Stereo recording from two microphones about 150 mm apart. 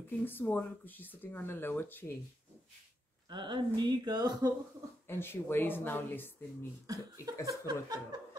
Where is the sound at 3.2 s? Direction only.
30° right (ahead or behind).